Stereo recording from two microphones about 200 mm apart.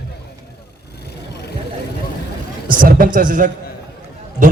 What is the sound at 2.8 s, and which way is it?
Speech, 45° right (ahead or behind).